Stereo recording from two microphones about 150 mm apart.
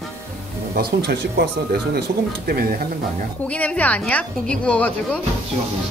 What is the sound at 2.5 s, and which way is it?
Speech, 85° right.